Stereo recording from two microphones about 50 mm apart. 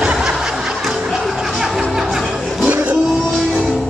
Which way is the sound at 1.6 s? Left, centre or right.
Centre.